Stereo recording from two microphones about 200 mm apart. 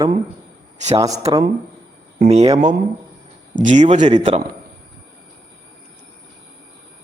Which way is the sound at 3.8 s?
35° right (ahead or behind).